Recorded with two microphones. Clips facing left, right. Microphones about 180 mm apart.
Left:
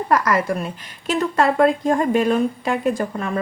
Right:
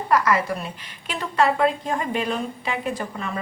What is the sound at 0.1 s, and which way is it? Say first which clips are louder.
A woman's voice: left 1 dB; 45° left (ahead or behind).